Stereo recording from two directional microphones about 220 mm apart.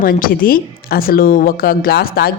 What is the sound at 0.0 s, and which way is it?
A woman's voice, 40° left (ahead or behind).